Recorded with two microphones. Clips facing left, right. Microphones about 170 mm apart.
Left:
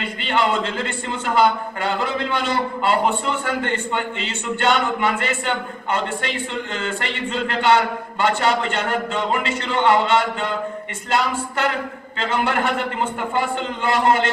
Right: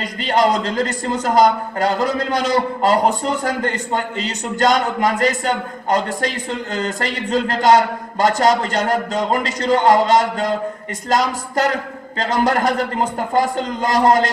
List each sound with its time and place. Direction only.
0.0 s a man's voice: 40° right (ahead or behind)